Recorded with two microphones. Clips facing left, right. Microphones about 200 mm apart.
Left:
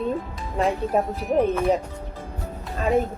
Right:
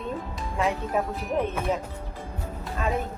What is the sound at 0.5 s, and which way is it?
Speech, 35° left (ahead or behind).